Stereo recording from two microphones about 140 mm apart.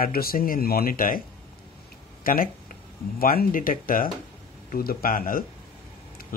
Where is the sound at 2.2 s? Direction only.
90° left.